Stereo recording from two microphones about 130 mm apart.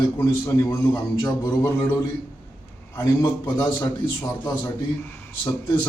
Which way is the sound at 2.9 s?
30° left (ahead or behind).